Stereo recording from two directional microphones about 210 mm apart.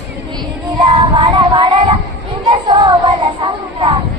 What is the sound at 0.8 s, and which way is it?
Child singing, 20° right (ahead or behind).